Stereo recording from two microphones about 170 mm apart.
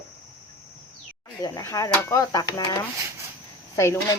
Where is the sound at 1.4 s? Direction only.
15° left (ahead or behind).